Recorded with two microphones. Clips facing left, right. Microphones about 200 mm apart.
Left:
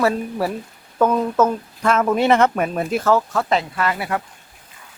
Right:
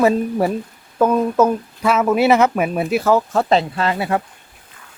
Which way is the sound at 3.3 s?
30° right (ahead or behind).